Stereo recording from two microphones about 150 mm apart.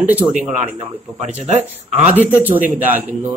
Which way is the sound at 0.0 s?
10° right (ahead or behind).